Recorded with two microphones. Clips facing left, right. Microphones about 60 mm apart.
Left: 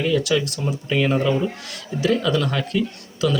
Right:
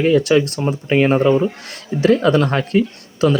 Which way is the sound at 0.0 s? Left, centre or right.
Right.